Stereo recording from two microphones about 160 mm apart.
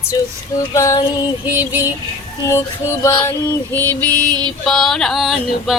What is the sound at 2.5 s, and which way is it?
Music, 15° left (ahead or behind).